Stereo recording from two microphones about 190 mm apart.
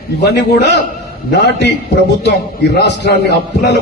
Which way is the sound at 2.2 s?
60° left (ahead or behind).